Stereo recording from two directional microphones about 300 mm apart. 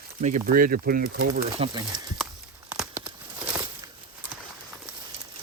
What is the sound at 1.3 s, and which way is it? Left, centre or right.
Speech, centre.